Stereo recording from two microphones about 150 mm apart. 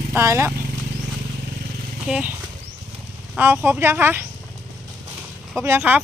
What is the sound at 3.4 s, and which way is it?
Speech, 15° right (ahead or behind).